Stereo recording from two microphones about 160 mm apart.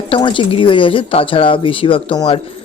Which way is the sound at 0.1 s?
30° left (ahead or behind).